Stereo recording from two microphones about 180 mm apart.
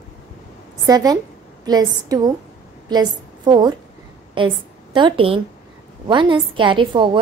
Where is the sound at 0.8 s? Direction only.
20° right (ahead or behind).